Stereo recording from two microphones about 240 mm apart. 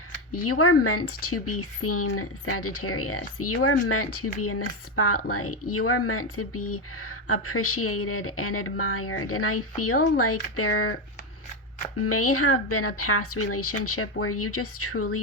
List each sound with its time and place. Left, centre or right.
0.3 s speech: left
11.9 s speech: left